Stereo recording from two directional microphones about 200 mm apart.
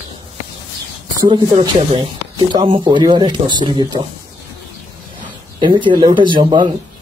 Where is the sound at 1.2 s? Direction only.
20° right (ahead or behind).